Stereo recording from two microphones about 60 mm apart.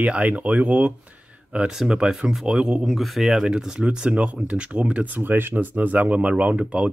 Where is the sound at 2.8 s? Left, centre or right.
Centre.